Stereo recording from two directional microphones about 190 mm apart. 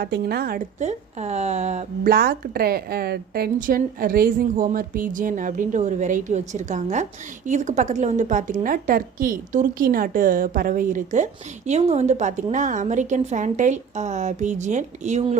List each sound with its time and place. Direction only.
0.0 s a woman's voice: 55° right (ahead or behind); by 2.1 s 35° right (ahead or behind)
2.1 s a woman's voice: 50° right (ahead or behind); by 15.4 s 35° right (ahead or behind)